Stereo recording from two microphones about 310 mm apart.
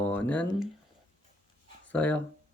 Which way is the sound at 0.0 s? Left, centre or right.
Centre.